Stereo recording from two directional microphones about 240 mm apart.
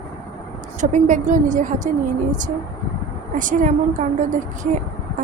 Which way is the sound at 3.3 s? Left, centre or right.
Right.